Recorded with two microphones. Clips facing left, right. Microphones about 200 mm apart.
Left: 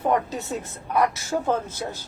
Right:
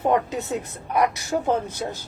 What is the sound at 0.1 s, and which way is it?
Speech, 20° right (ahead or behind).